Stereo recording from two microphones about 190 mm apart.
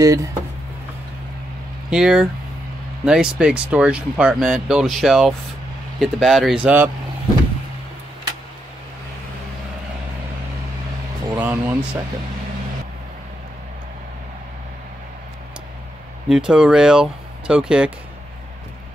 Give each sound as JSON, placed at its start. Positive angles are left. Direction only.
{"t": 0.0, "sound": "speech", "side_deg": -20}
{"t": 1.9, "sound": "speech", "side_deg": -5}
{"t": 11.3, "sound": "speech", "side_deg": -10}
{"t": 16.3, "sound": "speech", "side_deg": -5}